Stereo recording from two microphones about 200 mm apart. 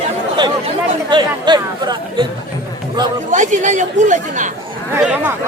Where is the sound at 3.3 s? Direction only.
40° right (ahead or behind).